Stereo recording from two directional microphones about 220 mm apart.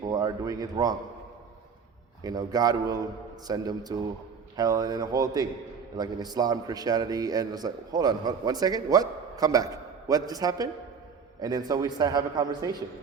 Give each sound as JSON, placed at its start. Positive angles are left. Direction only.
{"t": 0.0, "sound": "speech", "side_deg": -15}
{"t": 2.2, "sound": "a man's voice", "side_deg": -15}